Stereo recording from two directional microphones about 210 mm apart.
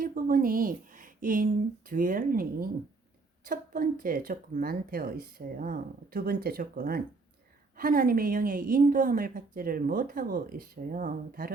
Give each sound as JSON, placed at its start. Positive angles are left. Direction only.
{"t": 0.0, "sound": "a woman's voice", "side_deg": -45}